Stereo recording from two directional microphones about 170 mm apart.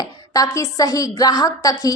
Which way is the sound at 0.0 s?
20° left (ahead or behind).